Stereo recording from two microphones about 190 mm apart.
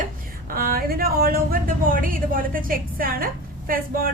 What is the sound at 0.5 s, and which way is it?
A woman's voice, 50° right (ahead or behind).